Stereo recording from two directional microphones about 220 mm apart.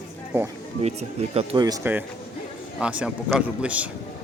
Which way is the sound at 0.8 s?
30° right (ahead or behind).